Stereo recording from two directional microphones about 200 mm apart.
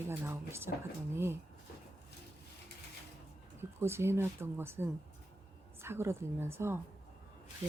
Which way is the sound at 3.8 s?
10° right (ahead or behind).